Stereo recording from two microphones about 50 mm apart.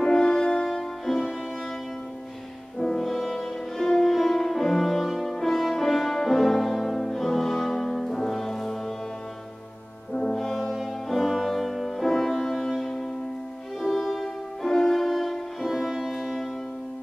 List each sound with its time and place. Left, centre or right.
0.0 s music: centre
2.8 s music: centre
10.1 s brass instrument: centre
10.5 s music: centre
13.7 s violin: centre